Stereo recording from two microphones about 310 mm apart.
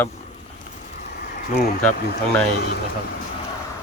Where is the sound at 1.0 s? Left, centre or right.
Left.